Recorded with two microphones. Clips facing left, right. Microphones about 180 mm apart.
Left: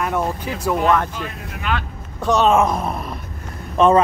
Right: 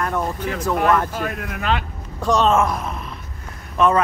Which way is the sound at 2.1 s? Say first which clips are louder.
Left 1 dB; centre (ahead or behind).